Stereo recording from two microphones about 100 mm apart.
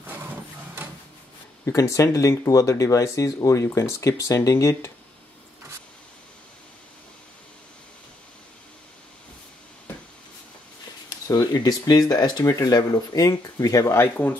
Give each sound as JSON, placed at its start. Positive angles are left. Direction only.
{"t": 1.7, "sound": "speech", "side_deg": 35}
{"t": 11.1, "sound": "speech", "side_deg": 40}
{"t": 14.1, "sound": "speech", "side_deg": 15}